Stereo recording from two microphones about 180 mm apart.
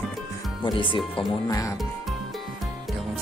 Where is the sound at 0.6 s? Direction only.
25° left (ahead or behind).